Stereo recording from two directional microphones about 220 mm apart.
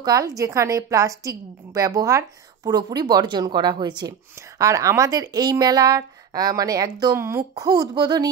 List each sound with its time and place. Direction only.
0.0 s a woman's voice: 15° right (ahead or behind)